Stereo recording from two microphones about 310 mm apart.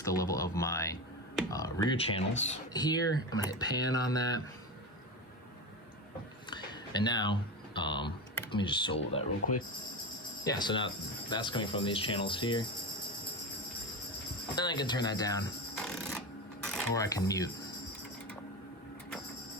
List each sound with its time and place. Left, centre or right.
0.0 s speech: centre
6.5 s a sound: centre
8.5 s speech: centre
10.4 s speech: centre
14.5 s speech: centre
15.7 s a sound: centre
16.6 s speech: centre